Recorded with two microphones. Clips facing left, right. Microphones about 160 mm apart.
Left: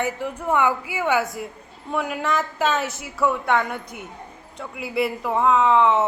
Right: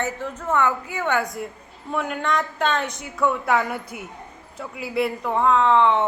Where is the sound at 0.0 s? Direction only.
10° left (ahead or behind).